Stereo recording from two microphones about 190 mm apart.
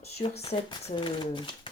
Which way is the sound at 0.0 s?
30° left (ahead or behind).